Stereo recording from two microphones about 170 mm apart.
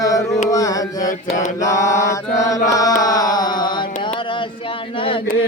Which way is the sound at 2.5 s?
20° left (ahead or behind).